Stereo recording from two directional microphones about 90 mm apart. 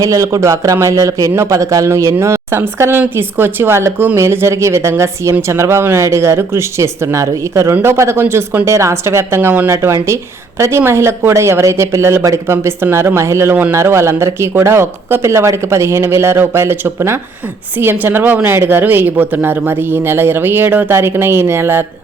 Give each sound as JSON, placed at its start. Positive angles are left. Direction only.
{"t": 0.0, "sound": "speech", "side_deg": -35}